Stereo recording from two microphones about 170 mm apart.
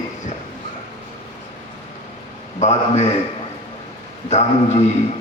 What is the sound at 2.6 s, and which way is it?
Speech, 40° left (ahead or behind).